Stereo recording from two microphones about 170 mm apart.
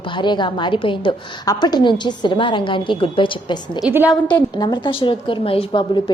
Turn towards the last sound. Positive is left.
turn(degrees=30)  # may be behind; listen again after turning